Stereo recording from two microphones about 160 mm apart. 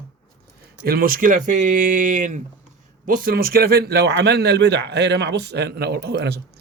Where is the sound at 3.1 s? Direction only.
65° right (ahead or behind); by 6.4 s 85° right.